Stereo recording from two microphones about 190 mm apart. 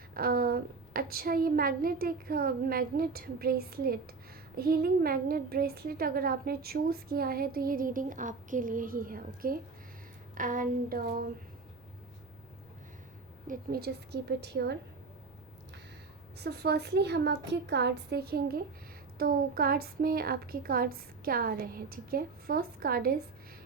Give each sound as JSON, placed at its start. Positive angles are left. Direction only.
{"t": 0.1, "sound": "a woman's voice", "side_deg": -50}
{"t": 13.5, "sound": "a woman's voice", "side_deg": -55}
{"t": 16.4, "sound": "a woman's voice", "side_deg": -60}